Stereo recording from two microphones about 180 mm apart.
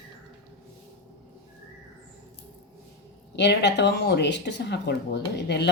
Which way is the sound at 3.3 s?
75° left (ahead or behind).